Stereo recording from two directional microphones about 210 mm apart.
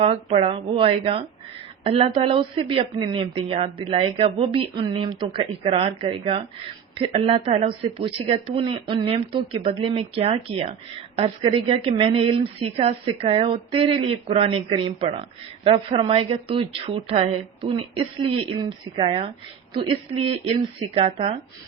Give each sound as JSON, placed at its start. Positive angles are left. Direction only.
{"t": 0.0, "sound": "a woman's voice", "side_deg": -30}